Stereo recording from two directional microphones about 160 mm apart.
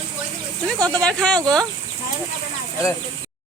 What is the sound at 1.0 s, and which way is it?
Speech, 5° left (ahead or behind).